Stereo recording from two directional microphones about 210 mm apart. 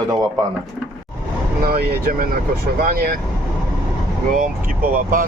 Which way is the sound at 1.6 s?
45° right (ahead or behind).